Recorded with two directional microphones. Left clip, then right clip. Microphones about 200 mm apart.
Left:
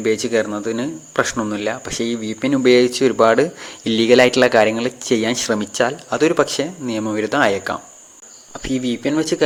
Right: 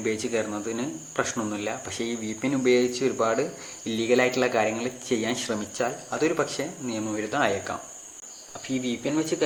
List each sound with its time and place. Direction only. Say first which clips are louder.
0.0 s speech: left 9 dB; 35° left (ahead or behind)